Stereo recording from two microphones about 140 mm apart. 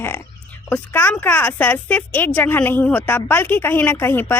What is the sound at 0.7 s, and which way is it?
A woman's voice, 15° left (ahead or behind).